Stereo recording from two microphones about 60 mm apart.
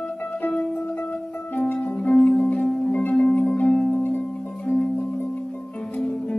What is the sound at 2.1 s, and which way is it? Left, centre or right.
Music, centre.